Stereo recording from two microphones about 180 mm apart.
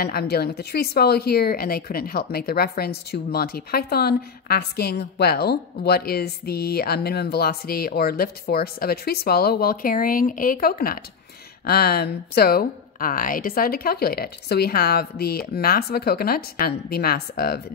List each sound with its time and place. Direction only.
0.0 s speech: 60° left (ahead or behind)